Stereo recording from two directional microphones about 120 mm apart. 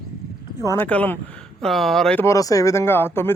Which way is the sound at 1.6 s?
Centre (ahead or behind).